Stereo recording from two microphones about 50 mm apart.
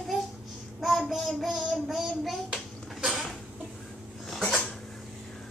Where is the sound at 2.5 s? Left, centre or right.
Centre.